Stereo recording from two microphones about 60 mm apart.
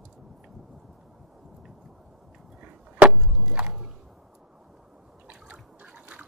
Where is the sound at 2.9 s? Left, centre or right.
Centre.